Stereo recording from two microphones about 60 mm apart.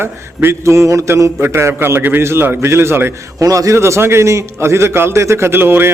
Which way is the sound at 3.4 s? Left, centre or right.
Right.